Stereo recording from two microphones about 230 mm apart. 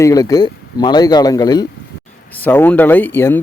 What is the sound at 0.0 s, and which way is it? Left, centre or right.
Speech, centre.